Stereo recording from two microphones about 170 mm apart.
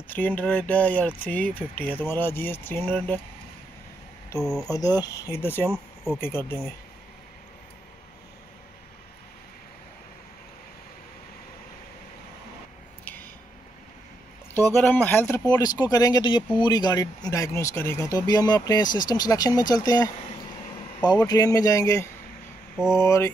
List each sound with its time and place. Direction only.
0.1 s speech: 10° left (ahead or behind)
4.4 s speech: centre (ahead or behind)
4.6 s speech: 20° left (ahead or behind)
13.0 s a sound: 10° left (ahead or behind)
14.5 s speech: 15° left (ahead or behind)
15.5 s speech: 25° left (ahead or behind)
21.3 s speech: 20° left (ahead or behind)